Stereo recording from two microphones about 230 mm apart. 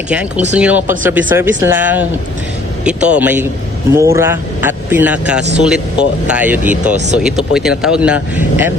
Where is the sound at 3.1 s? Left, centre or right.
Centre.